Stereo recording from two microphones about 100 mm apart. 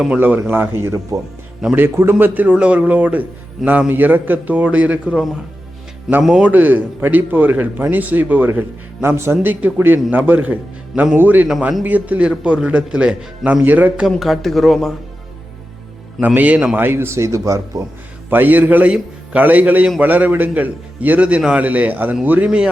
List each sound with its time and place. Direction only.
0.2 s a man's voice: 20° right (ahead or behind)
6.2 s speech: 10° right (ahead or behind)
16.2 s a man's voice: 15° right (ahead or behind); by 17.8 s 30° right (ahead or behind)
18.3 s speech: 20° right (ahead or behind)